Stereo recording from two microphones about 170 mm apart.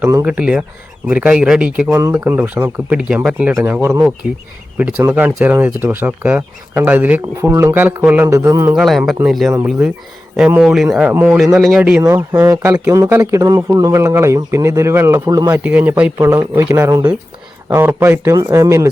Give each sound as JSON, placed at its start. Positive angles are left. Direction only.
{"t": 0.0, "sound": "speech", "side_deg": -15}
{"t": 0.3, "sound": "speech", "side_deg": -5}
{"t": 8.7, "sound": "speech", "side_deg": 0}